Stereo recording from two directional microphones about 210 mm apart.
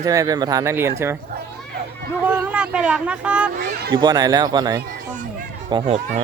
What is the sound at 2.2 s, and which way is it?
Speech, 5° right (ahead or behind).